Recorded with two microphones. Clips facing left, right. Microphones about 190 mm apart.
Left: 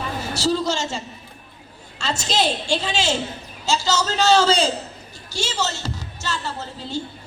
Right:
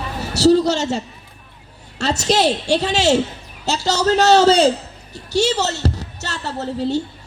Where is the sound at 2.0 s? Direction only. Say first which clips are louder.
Right 6 dB; 70° right (ahead or behind).